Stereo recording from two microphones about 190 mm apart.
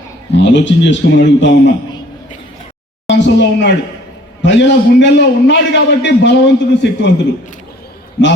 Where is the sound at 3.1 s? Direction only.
70° left (ahead or behind).